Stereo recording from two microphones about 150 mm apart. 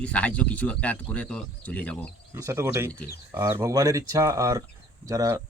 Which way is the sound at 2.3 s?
20° right (ahead or behind).